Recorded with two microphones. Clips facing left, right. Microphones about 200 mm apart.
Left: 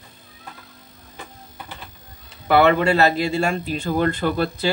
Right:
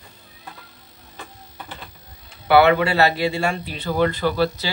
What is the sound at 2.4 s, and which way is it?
A man's voice, 45° left (ahead or behind).